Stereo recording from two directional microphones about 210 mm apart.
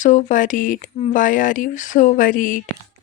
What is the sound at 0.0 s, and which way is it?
Speech, 35° left (ahead or behind).